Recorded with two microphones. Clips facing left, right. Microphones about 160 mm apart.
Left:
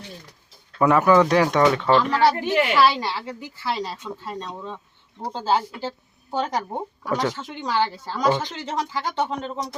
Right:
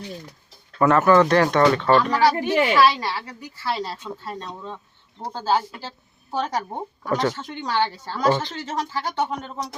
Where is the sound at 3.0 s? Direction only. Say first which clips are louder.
Left 1 dB; 25° left (ahead or behind).